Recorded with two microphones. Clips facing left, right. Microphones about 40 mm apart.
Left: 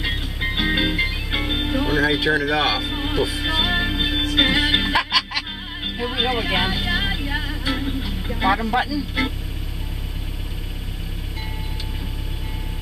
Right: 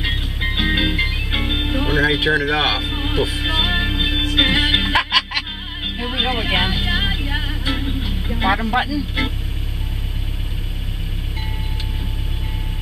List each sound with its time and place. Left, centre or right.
0.0 s music: centre
8.3 s speech: centre
9.2 s music: centre